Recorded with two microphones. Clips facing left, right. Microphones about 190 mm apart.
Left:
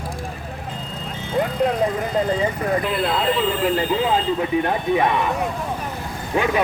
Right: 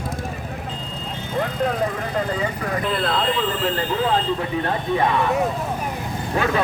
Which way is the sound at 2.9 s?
10° left (ahead or behind).